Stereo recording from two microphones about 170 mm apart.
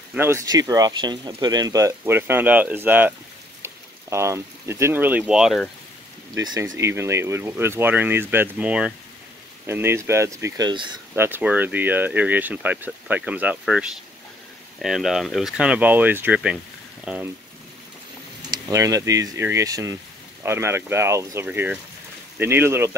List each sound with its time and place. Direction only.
0.1 s speech: 15° right (ahead or behind)
6.3 s speech: 20° right (ahead or behind)
11.1 s speech: 10° right (ahead or behind)
18.7 s speech: 20° right (ahead or behind)